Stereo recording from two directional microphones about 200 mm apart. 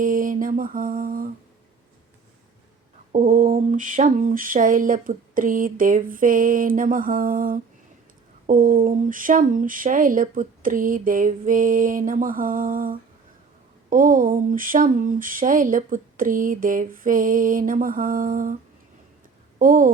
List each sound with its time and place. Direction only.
0.0 s mantra: 40° right (ahead or behind)
3.1 s a sound: 40° right (ahead or behind)
19.5 s speech: 40° right (ahead or behind)